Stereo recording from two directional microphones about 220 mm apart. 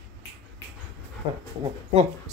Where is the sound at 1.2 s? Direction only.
20° right (ahead or behind).